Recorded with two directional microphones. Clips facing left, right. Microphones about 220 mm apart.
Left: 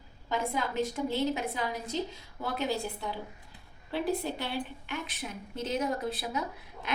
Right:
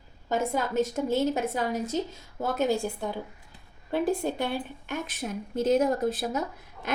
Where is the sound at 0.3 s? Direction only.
45° right (ahead or behind).